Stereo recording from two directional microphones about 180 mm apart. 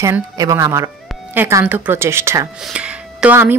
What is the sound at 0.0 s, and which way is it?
Speech, 20° right (ahead or behind).